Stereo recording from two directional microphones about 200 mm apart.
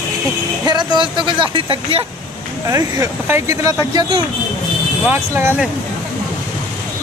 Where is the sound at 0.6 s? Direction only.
20° right (ahead or behind).